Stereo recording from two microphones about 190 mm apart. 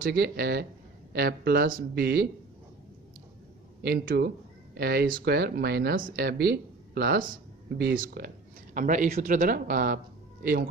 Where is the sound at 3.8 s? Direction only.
60° right (ahead or behind).